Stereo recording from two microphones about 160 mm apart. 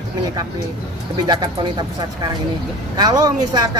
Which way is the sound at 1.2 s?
25° right (ahead or behind).